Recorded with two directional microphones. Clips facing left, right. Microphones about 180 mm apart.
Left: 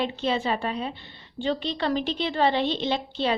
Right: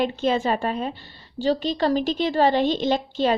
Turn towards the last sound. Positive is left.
turn(degrees=-45)  # may be behind; listen again after turning